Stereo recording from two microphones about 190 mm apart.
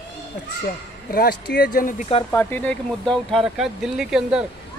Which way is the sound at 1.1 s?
55° left (ahead or behind).